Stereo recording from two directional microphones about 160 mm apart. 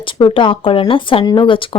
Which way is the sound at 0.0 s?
30° left (ahead or behind).